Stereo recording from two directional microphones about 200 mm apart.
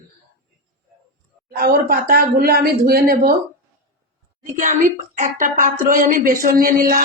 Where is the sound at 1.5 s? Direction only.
50° right (ahead or behind).